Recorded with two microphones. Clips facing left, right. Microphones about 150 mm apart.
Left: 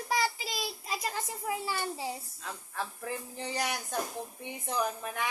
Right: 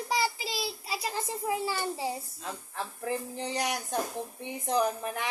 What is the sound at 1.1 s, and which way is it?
A woman's voice, 30° right (ahead or behind).